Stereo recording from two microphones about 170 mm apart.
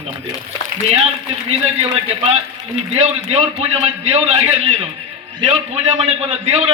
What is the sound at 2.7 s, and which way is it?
A man's voice, 40° right (ahead or behind).